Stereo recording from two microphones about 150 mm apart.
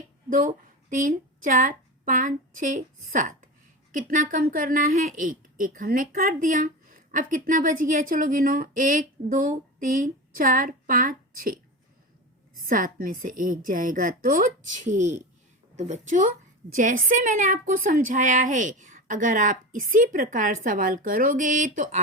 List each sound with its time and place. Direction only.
0.3 s a woman's voice: 65° right (ahead or behind)
12.6 s a woman's voice: 70° right (ahead or behind)